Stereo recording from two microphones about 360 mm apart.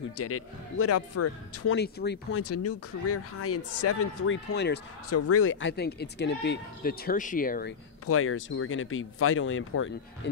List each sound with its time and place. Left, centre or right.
0.2 s speech: left
1.8 s speech: left
2.4 s speech: left
8.1 s speech: left